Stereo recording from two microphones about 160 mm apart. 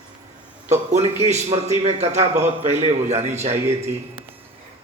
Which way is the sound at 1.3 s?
45° right (ahead or behind).